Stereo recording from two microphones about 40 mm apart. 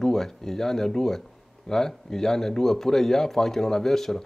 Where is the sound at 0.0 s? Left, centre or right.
Centre.